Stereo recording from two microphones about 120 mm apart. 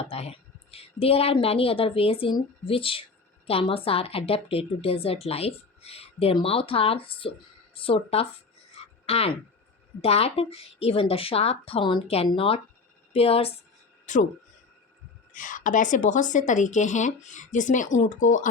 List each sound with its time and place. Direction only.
0.0 s a woman's voice: 55° left (ahead or behind)
8.7 s a sound: 60° left (ahead or behind)
10.0 s a woman's voice: 55° left (ahead or behind)
14.1 s a woman's voice: 90° left
15.3 s a woman's voice: 90° left